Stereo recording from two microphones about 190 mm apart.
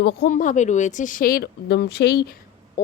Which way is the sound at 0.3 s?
40° left (ahead or behind).